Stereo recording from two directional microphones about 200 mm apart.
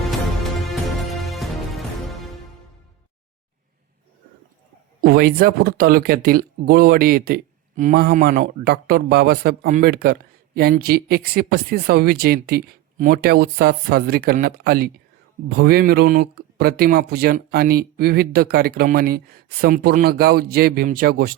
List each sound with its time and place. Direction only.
1.2 s music: centre (ahead or behind)
4.9 s speech: 50° right (ahead or behind)